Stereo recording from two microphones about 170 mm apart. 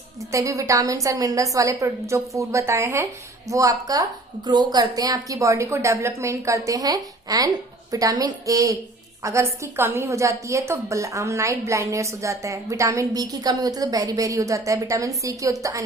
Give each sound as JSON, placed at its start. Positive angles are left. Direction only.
{"t": 0.3, "sound": "a woman's voice", "side_deg": -20}